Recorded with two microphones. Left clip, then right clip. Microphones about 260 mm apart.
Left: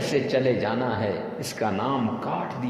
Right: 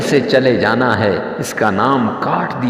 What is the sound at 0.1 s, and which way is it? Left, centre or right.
A man's voice, right.